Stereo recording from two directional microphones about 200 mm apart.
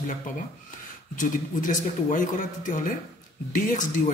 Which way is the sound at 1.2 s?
40° left (ahead or behind).